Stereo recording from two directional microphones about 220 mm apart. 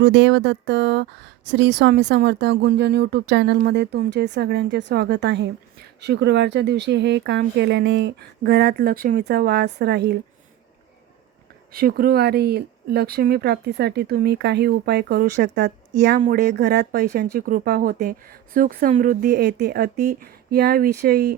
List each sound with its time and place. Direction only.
0.0 s speech: 55° right (ahead or behind)
11.7 s speech: 40° right (ahead or behind)